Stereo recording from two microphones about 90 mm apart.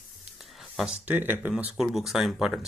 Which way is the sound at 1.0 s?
20° right (ahead or behind).